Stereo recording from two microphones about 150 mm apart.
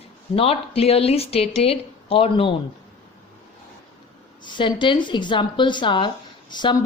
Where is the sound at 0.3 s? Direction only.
40° left (ahead or behind).